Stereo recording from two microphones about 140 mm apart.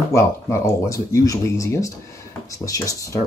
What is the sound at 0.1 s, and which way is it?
Speech, 20° left (ahead or behind).